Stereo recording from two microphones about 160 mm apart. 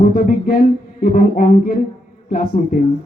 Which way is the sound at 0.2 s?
60° left (ahead or behind).